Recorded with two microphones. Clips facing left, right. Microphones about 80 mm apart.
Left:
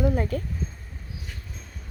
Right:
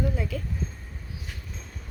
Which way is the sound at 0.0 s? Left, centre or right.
Left.